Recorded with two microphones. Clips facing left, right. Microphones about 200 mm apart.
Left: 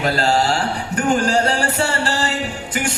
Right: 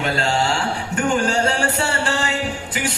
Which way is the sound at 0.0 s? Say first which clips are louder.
Left 3 dB; 40° left (ahead or behind).